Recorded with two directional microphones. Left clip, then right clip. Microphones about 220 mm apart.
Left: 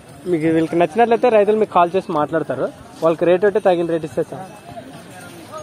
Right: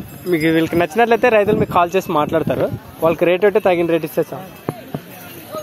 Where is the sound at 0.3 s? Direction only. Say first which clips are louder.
Right 1 dB; centre (ahead or behind).